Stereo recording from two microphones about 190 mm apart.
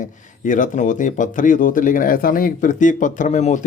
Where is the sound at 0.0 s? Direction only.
45° left (ahead or behind).